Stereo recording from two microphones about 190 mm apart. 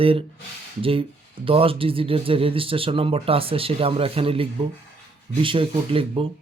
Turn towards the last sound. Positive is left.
turn(degrees=-30)  # may be behind; listen again after turning